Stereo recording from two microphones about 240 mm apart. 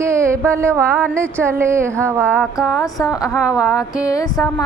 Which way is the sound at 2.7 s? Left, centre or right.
Centre.